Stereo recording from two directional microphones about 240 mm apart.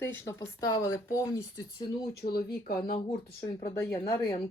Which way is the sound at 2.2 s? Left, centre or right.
Left.